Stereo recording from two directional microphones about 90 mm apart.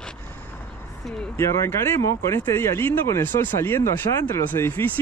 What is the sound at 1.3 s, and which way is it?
Speech, 30° left (ahead or behind).